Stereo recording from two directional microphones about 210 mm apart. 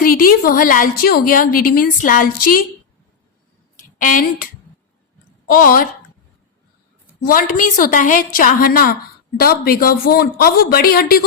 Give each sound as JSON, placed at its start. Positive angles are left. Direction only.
{"t": 0.0, "sound": "a woman's voice", "side_deg": 40}
{"t": 3.9, "sound": "a woman's voice", "side_deg": 40}
{"t": 5.5, "sound": "speech", "side_deg": 45}
{"t": 7.3, "sound": "a woman's voice", "side_deg": 40}